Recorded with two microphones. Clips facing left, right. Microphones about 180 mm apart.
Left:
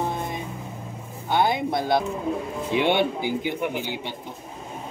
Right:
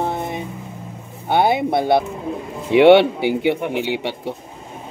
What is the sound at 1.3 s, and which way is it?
Speech, 65° right (ahead or behind).